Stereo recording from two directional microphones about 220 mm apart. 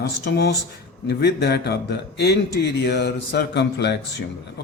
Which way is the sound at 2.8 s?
50° left (ahead or behind).